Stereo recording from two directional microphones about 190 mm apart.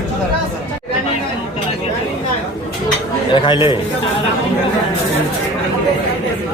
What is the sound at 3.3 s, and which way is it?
Speech, 25° left (ahead or behind).